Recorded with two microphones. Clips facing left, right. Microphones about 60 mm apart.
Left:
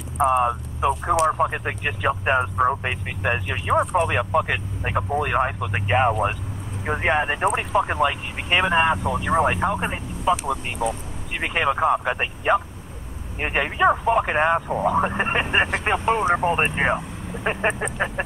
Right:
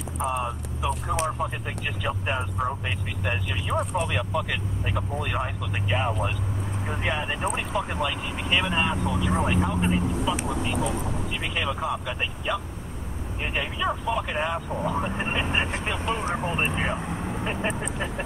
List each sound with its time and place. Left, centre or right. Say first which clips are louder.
0.2 s speech: left 9 dB; left
11.3 s speech: left 10 dB; left
16.3 s speech: left 8 dB; left
16.5 s speech: left 5 dB; left